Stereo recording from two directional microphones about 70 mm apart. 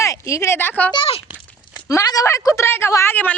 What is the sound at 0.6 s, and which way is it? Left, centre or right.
Speech, left.